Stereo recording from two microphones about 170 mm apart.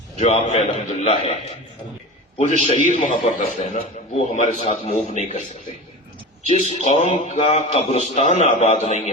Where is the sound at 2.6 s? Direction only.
40° left (ahead or behind).